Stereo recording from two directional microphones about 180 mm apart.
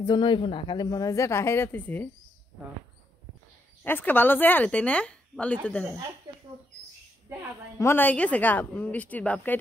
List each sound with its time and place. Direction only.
0.0 s a woman's voice: 25° left (ahead or behind); by 2.0 s 10° left (ahead or behind)
3.8 s a woman's voice: 10° left (ahead or behind)
7.8 s a woman's voice: 10° left (ahead or behind)